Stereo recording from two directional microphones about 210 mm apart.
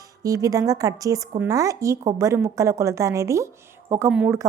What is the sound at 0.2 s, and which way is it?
A woman's voice, 15° right (ahead or behind).